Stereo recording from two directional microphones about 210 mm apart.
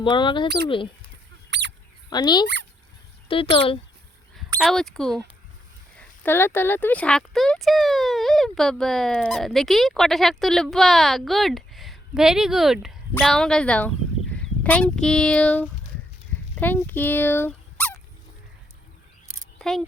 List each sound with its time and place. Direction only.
0.0 s speech: 20° left (ahead or behind)
1.5 s squeak: 55° right (ahead or behind)
2.0 s speech: 20° left (ahead or behind)
4.6 s speech: centre (ahead or behind)
19.5 s a sound: centre (ahead or behind)